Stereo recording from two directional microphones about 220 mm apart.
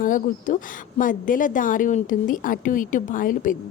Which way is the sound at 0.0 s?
35° left (ahead or behind).